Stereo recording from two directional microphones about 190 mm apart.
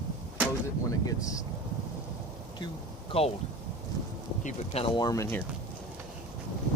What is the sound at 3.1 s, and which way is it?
Speech, 30° left (ahead or behind).